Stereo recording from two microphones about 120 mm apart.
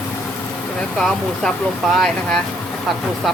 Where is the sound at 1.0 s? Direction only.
5° left (ahead or behind).